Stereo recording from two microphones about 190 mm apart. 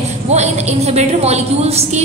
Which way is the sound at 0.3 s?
35° right (ahead or behind).